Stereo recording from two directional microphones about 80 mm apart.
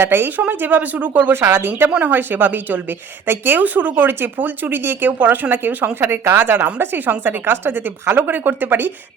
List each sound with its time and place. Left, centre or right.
0.0 s speech: right